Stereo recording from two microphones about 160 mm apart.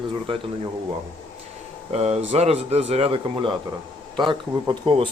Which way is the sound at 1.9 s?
40° right (ahead or behind).